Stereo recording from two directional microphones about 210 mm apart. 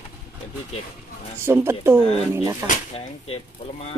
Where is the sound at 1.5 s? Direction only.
10° right (ahead or behind).